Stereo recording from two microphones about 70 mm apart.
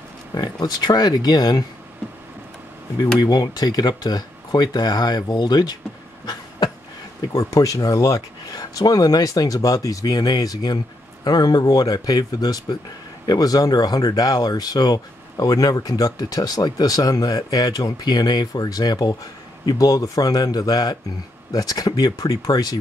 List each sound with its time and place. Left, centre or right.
0.3 s speech: left
3.2 s speech: left
7.3 s speech: left
8.5 s speech: left
11.2 s speech: left